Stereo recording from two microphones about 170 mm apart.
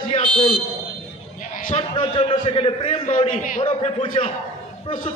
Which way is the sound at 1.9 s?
30° left (ahead or behind).